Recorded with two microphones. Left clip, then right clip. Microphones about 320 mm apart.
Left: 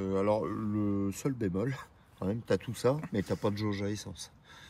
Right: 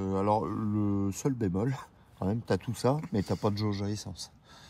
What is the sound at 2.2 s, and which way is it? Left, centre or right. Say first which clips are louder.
Speech: even; right.